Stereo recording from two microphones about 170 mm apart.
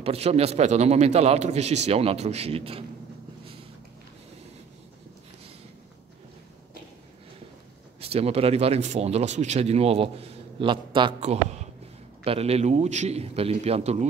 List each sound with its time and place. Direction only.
0.0 s speech: 35° right (ahead or behind)
8.0 s speech: 35° right (ahead or behind)